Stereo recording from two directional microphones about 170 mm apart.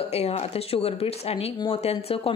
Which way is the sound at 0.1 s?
40° left (ahead or behind).